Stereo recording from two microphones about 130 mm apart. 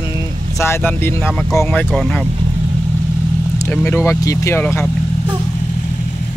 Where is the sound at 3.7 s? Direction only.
15° left (ahead or behind).